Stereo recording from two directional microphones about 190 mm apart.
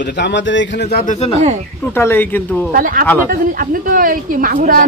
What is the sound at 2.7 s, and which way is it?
Speech, 45° right (ahead or behind).